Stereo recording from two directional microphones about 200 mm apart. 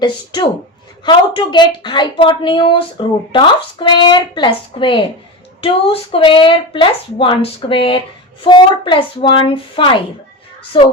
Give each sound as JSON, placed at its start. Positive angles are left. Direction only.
{"t": 0.0, "sound": "a woman's voice", "side_deg": 25}